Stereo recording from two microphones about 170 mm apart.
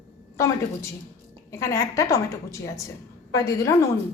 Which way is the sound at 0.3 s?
20° left (ahead or behind).